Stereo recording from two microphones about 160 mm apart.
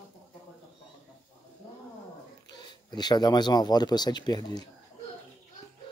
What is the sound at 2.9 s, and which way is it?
Speech, 25° left (ahead or behind).